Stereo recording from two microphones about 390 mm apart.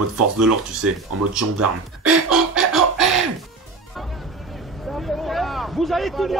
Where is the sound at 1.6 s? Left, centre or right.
Centre.